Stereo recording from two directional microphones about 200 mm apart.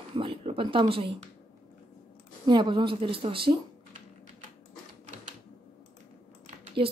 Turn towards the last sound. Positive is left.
turn(degrees=-30)  # may be behind; listen again after turning